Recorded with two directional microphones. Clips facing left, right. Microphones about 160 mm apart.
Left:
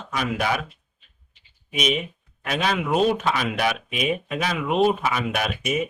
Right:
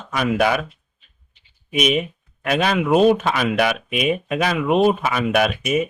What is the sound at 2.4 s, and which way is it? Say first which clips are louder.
Speech: right 5 dB; 55° right (ahead or behind).